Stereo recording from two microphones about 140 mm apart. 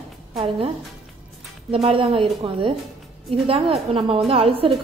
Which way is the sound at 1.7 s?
40° right (ahead or behind).